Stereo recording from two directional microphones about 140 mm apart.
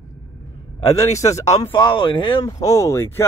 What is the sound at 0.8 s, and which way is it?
Speech, 20° left (ahead or behind).